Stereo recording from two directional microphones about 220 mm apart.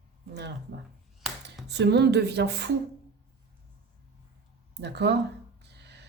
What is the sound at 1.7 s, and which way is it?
Speech, 50° right (ahead or behind).